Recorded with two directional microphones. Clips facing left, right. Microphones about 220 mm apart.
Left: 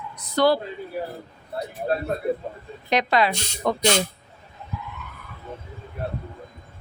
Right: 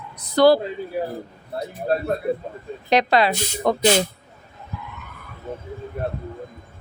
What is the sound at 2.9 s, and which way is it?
Speech, 35° right (ahead or behind).